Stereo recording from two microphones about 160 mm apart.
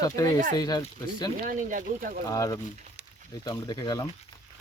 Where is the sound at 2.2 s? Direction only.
20° left (ahead or behind).